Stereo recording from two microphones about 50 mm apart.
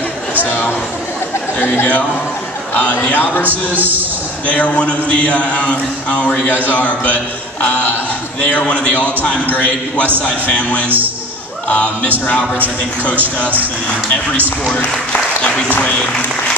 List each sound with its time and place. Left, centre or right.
0.5 s a man's voice: left
3.4 s a man's voice: right
4.5 s a man's voice: left
8.4 s a man's voice: left